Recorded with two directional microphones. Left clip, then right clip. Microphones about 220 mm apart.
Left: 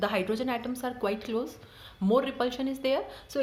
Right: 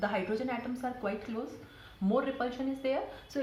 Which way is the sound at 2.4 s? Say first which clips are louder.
Left 4 dB; 55° left (ahead or behind).